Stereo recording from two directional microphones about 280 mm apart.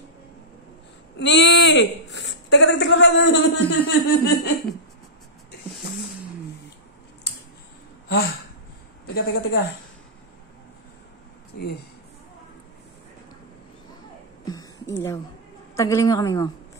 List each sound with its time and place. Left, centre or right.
1.1 s speech: left
8.1 s a woman's voice: left
14.4 s a sound: centre
15.7 s a woman's voice: centre